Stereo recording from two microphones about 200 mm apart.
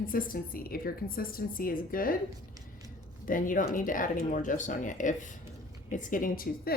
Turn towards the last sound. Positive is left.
turn(degrees=45)  # may be behind; listen again after turning